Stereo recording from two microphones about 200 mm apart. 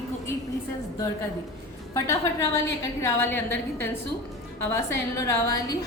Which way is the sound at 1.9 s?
15° left (ahead or behind).